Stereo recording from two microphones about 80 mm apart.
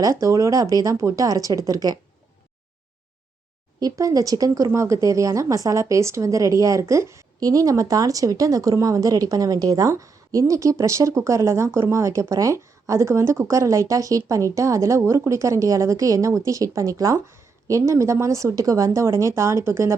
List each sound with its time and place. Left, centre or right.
0.0 s speech: right
3.8 s speech: right
7.3 s speech: right